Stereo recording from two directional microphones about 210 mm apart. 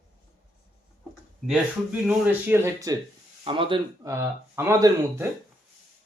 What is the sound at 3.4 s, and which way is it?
Speech, 25° right (ahead or behind).